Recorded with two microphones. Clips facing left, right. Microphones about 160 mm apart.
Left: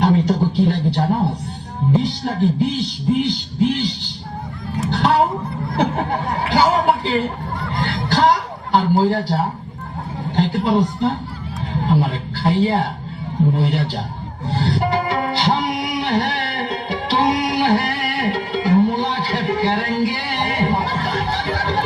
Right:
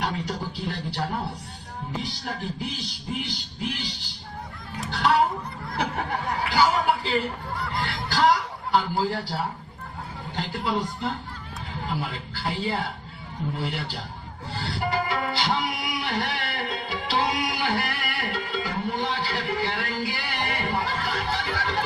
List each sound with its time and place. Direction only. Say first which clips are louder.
0.0 s music: left 13 dB; 25° left (ahead or behind)
4.8 s chuckle: left 5 dB; 25° left (ahead or behind)
7.8 s a sound: left 6 dB; 25° left (ahead or behind)
10.3 s speech: left 11 dB; 25° left (ahead or behind)
13.5 s music: left 10 dB; 25° left (ahead or behind)